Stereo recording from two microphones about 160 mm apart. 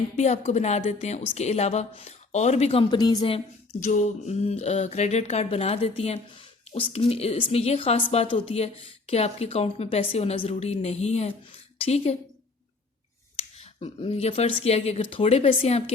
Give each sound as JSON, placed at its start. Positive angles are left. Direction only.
{"t": 0.2, "sound": "a woman's voice", "side_deg": 45}
{"t": 2.9, "sound": "a woman's voice", "side_deg": 25}
{"t": 3.8, "sound": "a woman's voice", "side_deg": 45}
{"t": 13.3, "sound": "speech", "side_deg": 40}